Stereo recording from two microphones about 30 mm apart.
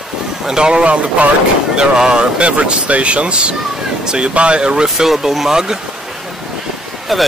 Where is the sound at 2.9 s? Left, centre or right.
Right.